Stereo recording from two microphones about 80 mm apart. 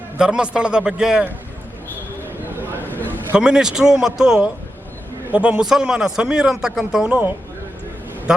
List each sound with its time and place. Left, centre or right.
0.2 s a man's voice: centre
2.8 s a sound: left
3.3 s a man's voice: centre